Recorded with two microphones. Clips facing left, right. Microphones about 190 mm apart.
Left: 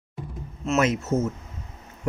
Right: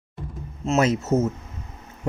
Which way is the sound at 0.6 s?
35° right (ahead or behind).